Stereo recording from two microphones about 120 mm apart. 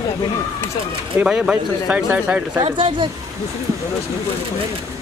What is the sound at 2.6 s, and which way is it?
Speech, 45° right (ahead or behind).